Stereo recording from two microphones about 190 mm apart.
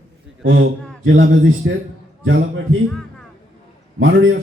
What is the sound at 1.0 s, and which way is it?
Speech, 80° right.